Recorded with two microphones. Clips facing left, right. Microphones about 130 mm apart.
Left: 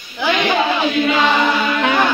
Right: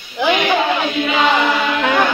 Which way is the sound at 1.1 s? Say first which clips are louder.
Right 2 dB; 15° right (ahead or behind).